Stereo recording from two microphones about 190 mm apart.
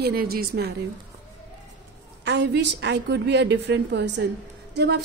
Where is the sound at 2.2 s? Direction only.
65° right (ahead or behind).